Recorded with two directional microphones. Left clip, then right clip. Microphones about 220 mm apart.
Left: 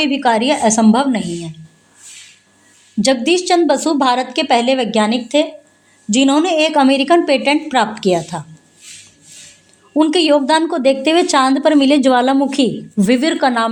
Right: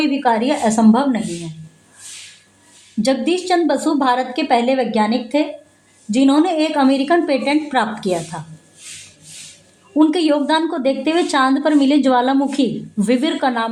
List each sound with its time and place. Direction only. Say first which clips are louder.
0.0 s a woman's voice: left 2 dB; 40° left (ahead or behind)
3.0 s a woman's voice: left 4 dB; 40° left (ahead or behind)
9.9 s a woman's voice: left 3 dB; 35° left (ahead or behind)